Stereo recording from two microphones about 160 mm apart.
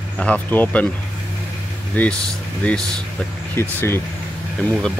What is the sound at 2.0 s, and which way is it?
Speech, 10° left (ahead or behind).